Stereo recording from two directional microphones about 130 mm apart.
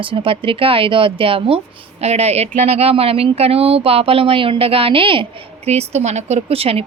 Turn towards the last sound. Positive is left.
turn(degrees=-50)  # may be behind; listen again after turning